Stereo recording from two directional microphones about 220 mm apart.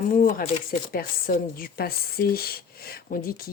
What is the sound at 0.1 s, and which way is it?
Speech, 35° left (ahead or behind).